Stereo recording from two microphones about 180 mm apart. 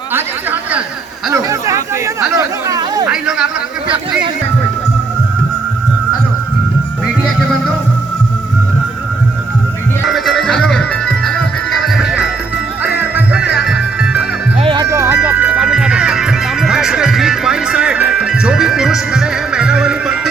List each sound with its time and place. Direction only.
1.3 s a sound: 15° right (ahead or behind)
2.4 s chatter: 20° right (ahead or behind)
3.1 s a sound: 5° right (ahead or behind)
10.1 s music: centre (ahead or behind)
14.6 s music: 25° right (ahead or behind)
14.9 s music: 15° right (ahead or behind)